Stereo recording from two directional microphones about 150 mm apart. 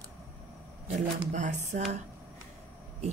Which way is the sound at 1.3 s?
55° right (ahead or behind).